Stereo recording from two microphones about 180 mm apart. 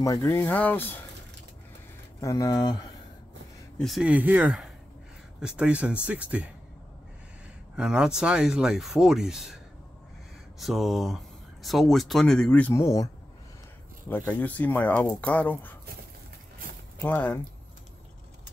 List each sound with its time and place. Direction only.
0.0 s speech: 20° left (ahead or behind)
2.1 s speech: 20° left (ahead or behind)
3.7 s speech: centre (ahead or behind)
7.7 s speech: 5° right (ahead or behind)
10.6 s speech: centre (ahead or behind)
17.0 s speech: 10° left (ahead or behind)